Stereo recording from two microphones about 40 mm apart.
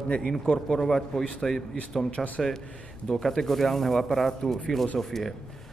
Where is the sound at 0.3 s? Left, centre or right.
Centre.